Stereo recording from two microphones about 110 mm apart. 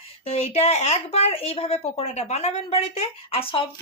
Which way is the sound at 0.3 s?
80° left.